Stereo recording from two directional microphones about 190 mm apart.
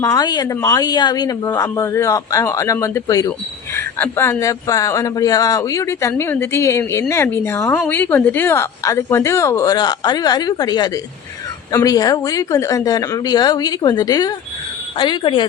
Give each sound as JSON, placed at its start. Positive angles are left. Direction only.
{"t": 0.0, "sound": "a woman's voice", "side_deg": 20}